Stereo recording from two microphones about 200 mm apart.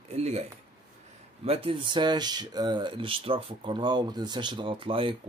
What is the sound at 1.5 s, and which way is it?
Speech, 30° right (ahead or behind).